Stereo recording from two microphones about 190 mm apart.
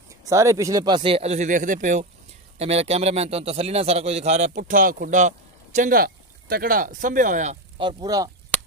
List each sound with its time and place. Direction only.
0.2 s a man's voice: 15° right (ahead or behind); by 7.5 s 40° right (ahead or behind)
7.8 s speech: 20° right (ahead or behind)